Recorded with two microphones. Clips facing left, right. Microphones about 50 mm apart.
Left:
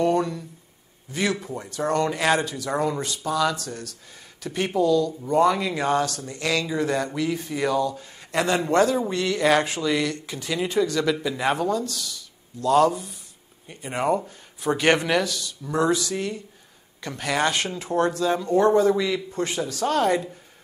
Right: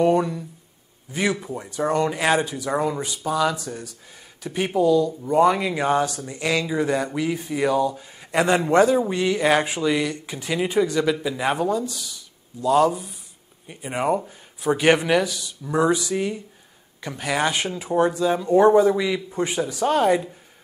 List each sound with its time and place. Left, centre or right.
0.0 s speech: centre